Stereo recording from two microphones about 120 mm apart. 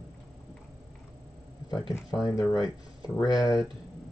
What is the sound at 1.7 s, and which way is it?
Speech, 30° left (ahead or behind).